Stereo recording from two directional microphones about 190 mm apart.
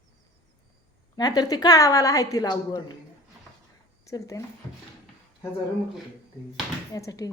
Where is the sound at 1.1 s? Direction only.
20° left (ahead or behind).